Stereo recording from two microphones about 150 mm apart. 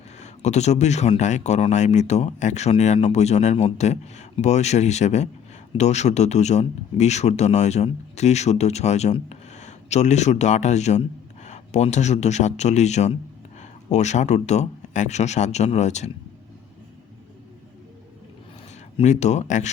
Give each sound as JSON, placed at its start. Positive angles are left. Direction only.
{"t": 0.2, "sound": "speech", "side_deg": 50}
{"t": 18.9, "sound": "speech", "side_deg": 50}